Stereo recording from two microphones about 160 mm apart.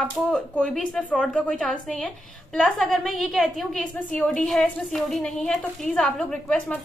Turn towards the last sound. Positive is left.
turn(degrees=5)  # may be behind; listen again after turning